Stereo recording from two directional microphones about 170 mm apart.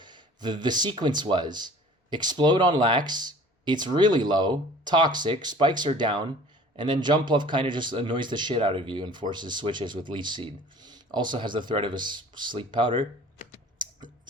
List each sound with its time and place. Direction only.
0.0 s a man's voice: 25° right (ahead or behind)